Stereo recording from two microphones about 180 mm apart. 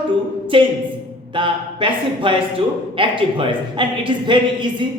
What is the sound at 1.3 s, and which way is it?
A man's voice, 25° right (ahead or behind).